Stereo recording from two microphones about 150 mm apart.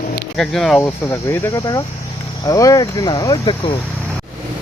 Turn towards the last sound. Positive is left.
turn(degrees=35)  # may be behind; listen again after turning